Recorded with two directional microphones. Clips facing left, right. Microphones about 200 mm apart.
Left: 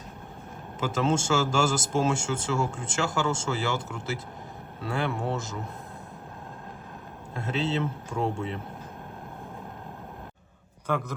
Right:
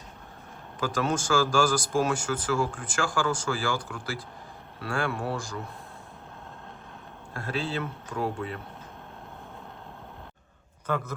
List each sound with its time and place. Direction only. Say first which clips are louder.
0.8 s a man's voice: left 2 dB; 25° left (ahead or behind)
7.3 s a man's voice: left 3 dB; 25° left (ahead or behind)